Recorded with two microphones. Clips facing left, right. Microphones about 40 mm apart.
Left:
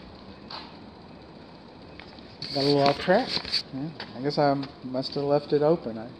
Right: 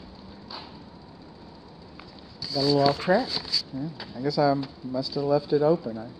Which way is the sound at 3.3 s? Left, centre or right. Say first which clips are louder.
Even; left.